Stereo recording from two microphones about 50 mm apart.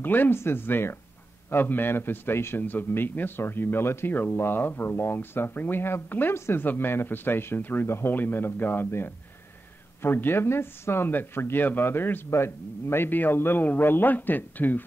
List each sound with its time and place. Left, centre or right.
0.0 s speech: left
2.6 s speech: left
6.3 s speech: left
6.6 s speech: left
11.1 s speech: left
12.3 s speech: left